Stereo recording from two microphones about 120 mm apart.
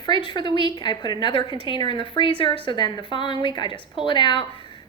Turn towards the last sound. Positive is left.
turn(degrees=40)  # may be behind; listen again after turning